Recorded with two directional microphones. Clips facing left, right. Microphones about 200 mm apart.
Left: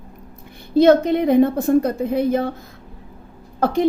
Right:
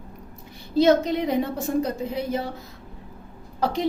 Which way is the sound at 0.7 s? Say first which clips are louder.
Left 5 dB; 55° left (ahead or behind).